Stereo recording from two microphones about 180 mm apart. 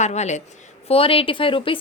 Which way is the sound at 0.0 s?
40° left (ahead or behind).